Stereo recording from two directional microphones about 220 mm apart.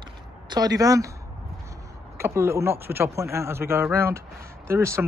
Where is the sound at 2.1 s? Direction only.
10° right (ahead or behind).